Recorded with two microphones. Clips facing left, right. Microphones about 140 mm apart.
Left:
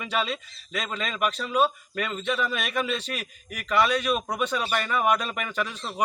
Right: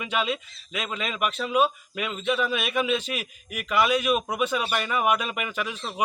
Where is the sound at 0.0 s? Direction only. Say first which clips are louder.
Right 1 dB; 5° right (ahead or behind).